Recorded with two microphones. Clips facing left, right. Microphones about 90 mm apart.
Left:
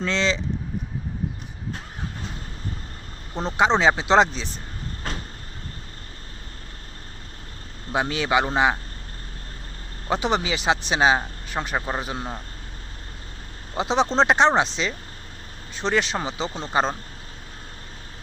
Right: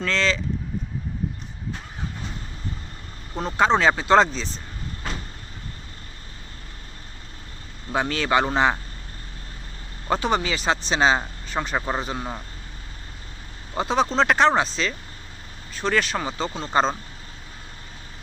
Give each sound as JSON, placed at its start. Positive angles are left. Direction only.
{"t": 0.0, "sound": "speech", "side_deg": 20}
{"t": 3.4, "sound": "speech", "side_deg": 20}
{"t": 7.9, "sound": "speech", "side_deg": 15}
{"t": 10.1, "sound": "speech", "side_deg": 15}
{"t": 13.7, "sound": "speech", "side_deg": 20}
{"t": 16.6, "sound": "speech", "side_deg": 10}